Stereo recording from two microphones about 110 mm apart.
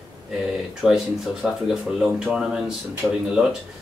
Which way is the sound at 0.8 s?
5° right (ahead or behind).